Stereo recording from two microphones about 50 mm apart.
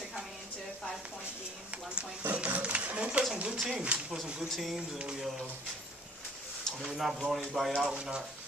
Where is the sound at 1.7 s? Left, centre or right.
Right.